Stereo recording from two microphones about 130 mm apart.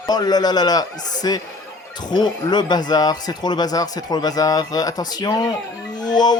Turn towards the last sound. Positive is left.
turn(degrees=35)  # may be behind; listen again after turning